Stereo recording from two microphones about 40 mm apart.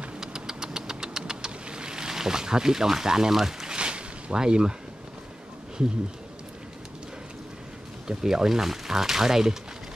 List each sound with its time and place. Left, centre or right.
0.2 s vehicle: centre
3.7 s a sound: right
8.1 s speech: centre